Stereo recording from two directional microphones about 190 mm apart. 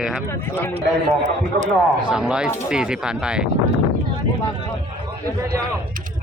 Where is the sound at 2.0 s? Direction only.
5° right (ahead or behind).